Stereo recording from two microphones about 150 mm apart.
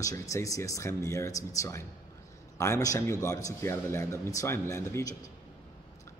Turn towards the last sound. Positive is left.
turn(degrees=20)  # may be behind; listen again after turning